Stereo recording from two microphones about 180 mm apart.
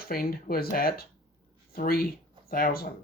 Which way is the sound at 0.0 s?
55° left (ahead or behind).